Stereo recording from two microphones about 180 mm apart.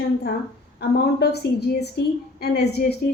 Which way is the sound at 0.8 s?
65° left (ahead or behind).